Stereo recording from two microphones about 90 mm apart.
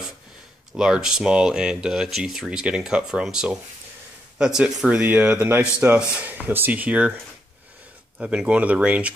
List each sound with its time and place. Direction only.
0.7 s speech: 5° right (ahead or behind)
8.2 s speech: 10° right (ahead or behind)